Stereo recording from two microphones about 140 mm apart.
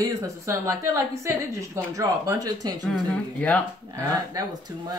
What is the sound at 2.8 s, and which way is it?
Speech, 10° left (ahead or behind).